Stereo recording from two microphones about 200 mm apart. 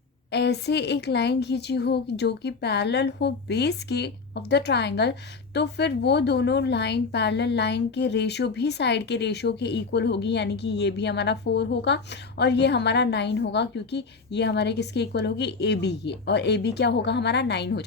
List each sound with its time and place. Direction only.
0.3 s a woman's voice: 55° left (ahead or behind)